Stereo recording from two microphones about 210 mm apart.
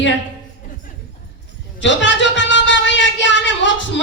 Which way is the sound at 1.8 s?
60° left (ahead or behind).